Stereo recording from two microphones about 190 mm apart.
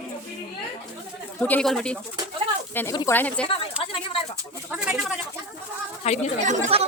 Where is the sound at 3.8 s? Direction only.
25° left (ahead or behind).